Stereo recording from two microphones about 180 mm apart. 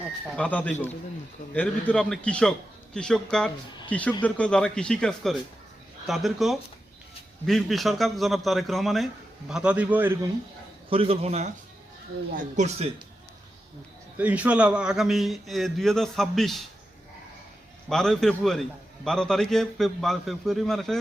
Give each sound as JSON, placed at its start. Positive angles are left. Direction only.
{"t": 0.3, "sound": "a man's voice", "side_deg": 5}
{"t": 10.8, "sound": "a man's voice", "side_deg": -30}
{"t": 12.5, "sound": "a man's voice", "side_deg": -40}
{"t": 14.2, "sound": "a man's voice", "side_deg": -10}
{"t": 17.8, "sound": "a man's voice", "side_deg": 0}